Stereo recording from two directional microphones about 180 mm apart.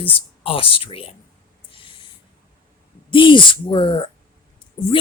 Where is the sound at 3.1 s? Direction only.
25° left (ahead or behind).